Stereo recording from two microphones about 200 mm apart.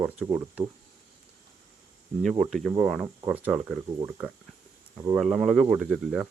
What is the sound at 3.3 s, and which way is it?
Speech, 5° right (ahead or behind).